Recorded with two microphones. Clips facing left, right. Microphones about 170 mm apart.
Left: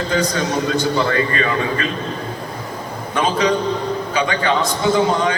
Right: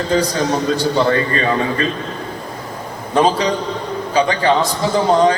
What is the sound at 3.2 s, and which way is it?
A man's voice, 35° right (ahead or behind).